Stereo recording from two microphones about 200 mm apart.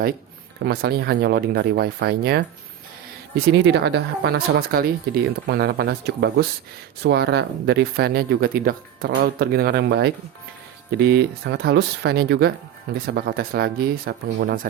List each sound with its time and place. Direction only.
0.6 s speech: 55° right (ahead or behind)